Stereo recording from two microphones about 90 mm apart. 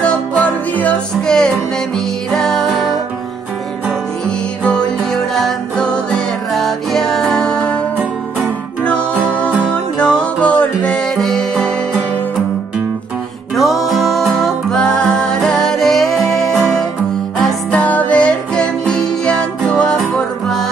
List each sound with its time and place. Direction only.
0.0 s music: 15° left (ahead or behind)
4.6 s music: 5° left (ahead or behind)
9.9 s music: 10° left (ahead or behind)
13.6 s music: centre (ahead or behind)
17.4 s music: centre (ahead or behind)
17.7 s music: 15° left (ahead or behind)